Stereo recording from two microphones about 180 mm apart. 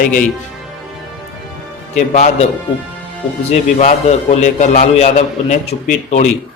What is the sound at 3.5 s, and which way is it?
A man's voice, 40° left (ahead or behind).